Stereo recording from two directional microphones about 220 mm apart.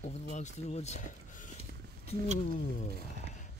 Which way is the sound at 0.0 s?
30° left (ahead or behind).